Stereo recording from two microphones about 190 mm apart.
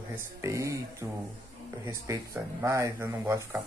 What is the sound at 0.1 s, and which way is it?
Speech, 15° right (ahead or behind).